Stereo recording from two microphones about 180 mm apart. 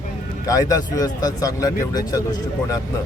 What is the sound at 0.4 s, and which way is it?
Speech, 20° left (ahead or behind).